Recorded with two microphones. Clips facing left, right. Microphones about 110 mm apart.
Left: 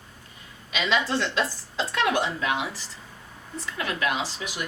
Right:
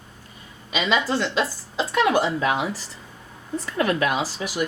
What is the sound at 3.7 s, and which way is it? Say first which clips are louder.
Speech: right 8 dB; 40° right (ahead or behind).